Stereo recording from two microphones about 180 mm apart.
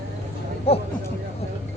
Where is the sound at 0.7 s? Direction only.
35° left (ahead or behind).